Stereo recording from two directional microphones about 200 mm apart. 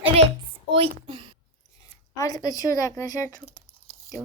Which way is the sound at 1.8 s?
15° left (ahead or behind).